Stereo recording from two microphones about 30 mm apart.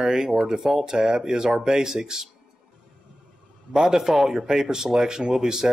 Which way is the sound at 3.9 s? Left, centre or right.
Centre.